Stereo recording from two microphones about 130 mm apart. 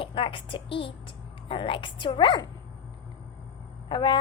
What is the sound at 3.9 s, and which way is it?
Speech, 35° left (ahead or behind).